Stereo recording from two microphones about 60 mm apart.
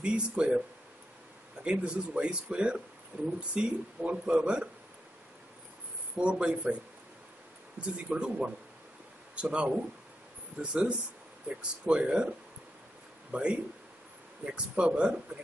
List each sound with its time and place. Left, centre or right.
0.0 s speech: centre
1.6 s speech: centre
6.1 s speech: centre
7.8 s speech: centre
13.3 s speech: centre
14.8 s speech: centre